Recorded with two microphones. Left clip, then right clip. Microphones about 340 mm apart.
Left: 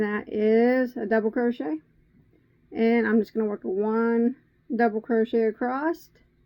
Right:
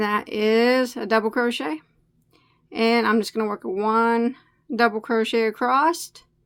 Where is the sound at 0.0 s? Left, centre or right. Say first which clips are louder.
Right 3 dB; right.